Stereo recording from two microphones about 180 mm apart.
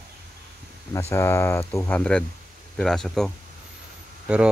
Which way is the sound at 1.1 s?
15° left (ahead or behind).